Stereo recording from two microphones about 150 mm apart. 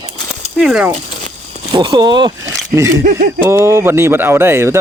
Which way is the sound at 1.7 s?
30° right (ahead or behind).